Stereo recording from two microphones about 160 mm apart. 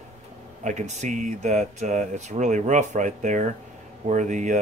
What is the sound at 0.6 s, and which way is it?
Speech, 50° right (ahead or behind).